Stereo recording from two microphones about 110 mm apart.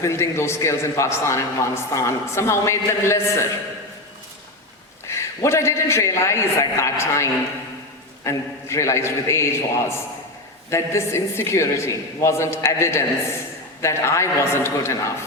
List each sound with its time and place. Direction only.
0.0 s a man's voice: 25° left (ahead or behind)
5.0 s a man's voice: 25° left (ahead or behind)